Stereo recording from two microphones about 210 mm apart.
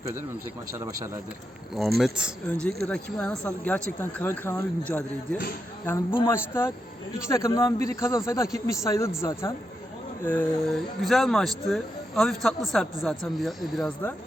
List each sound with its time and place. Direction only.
0.7 s a man's voice: 15° right (ahead or behind)
2.0 s speech: 5° right (ahead or behind)